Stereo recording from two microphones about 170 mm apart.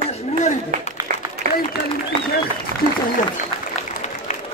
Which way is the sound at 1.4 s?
60° right (ahead or behind).